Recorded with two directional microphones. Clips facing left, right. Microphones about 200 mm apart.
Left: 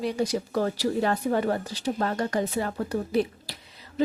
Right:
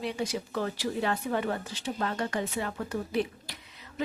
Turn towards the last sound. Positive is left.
turn(degrees=35)  # may be behind; listen again after turning